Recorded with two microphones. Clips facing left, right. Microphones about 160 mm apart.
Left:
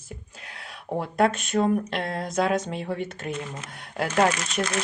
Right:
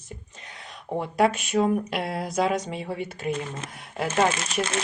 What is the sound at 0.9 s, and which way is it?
Speech, centre (ahead or behind).